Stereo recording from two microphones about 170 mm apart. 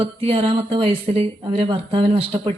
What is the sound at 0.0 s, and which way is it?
Speech, 35° right (ahead or behind).